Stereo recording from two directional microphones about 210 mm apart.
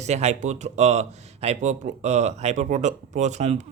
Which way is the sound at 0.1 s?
30° right (ahead or behind).